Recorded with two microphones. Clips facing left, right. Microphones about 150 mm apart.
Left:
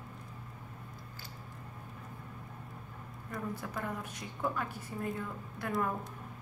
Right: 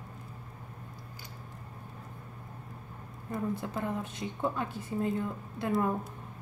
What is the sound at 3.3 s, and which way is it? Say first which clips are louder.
A woman's voice: right 5 dB; 25° right (ahead or behind).